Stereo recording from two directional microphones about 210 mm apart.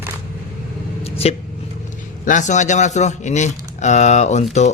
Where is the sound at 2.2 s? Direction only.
35° left (ahead or behind).